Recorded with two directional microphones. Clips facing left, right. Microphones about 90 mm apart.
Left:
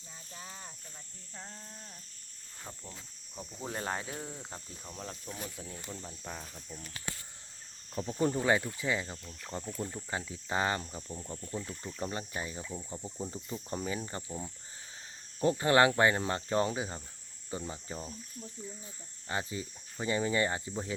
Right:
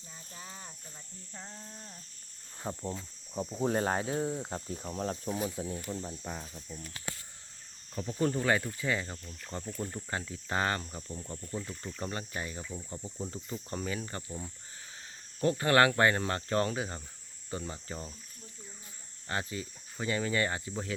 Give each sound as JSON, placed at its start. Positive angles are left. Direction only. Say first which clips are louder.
{"t": 0.3, "sound": "sizzle", "louder": "even", "side_deg": 0}
{"t": 2.6, "sound": "speech", "louder": "right 11 dB", "side_deg": -30}
{"t": 4.9, "sound": "speech", "louder": "right 9 dB", "side_deg": -40}
{"t": 5.3, "sound": "speech", "louder": "right 9 dB", "side_deg": -20}
{"t": 5.9, "sound": "speech", "louder": "right 5 dB", "side_deg": -10}
{"t": 8.2, "sound": "speech", "louder": "even", "side_deg": 15}
{"t": 12.1, "sound": "speech", "louder": "even", "side_deg": 20}
{"t": 19.3, "sound": "speech", "louder": "even", "side_deg": 20}